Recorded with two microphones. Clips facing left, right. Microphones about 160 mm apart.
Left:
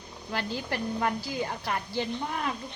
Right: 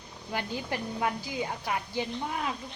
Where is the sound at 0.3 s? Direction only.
15° right (ahead or behind).